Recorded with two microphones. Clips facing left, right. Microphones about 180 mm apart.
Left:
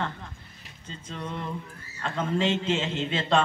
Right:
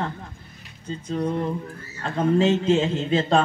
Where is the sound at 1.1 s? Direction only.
40° right (ahead or behind).